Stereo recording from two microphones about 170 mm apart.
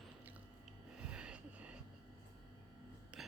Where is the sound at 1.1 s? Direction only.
5° right (ahead or behind).